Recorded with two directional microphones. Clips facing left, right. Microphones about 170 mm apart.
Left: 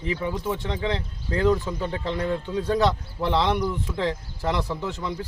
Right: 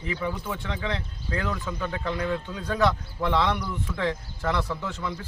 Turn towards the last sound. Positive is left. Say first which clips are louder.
# left 2 dB
turn(degrees=20)  # may be behind; listen again after turning